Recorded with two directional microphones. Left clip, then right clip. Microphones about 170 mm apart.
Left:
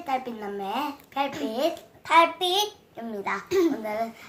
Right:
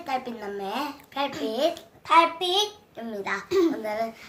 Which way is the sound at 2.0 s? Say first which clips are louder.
Even; 10° left (ahead or behind).